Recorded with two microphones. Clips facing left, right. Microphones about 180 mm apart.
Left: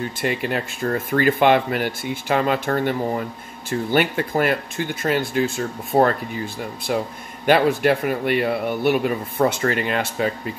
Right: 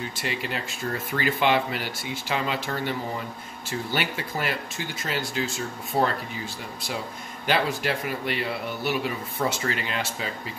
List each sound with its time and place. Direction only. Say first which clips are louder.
0.2 s speech: left 8 dB; 55° left (ahead or behind)